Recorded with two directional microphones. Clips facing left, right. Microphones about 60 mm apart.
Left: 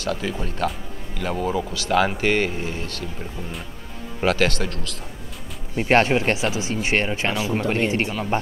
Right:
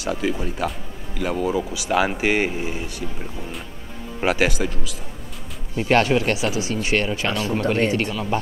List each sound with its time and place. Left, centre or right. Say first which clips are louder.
0.0 s speech: right 2 dB; centre
4.2 s speech: even; centre
5.8 s speech: even; left